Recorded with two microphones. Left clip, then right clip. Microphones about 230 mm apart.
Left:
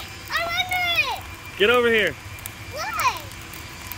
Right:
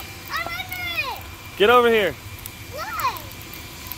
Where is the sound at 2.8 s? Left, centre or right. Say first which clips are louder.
Left 2 dB; left.